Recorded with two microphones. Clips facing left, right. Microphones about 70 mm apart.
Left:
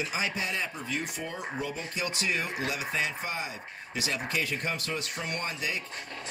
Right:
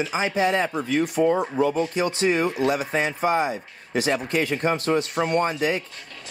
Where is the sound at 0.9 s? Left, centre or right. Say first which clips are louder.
Right 18 dB; right.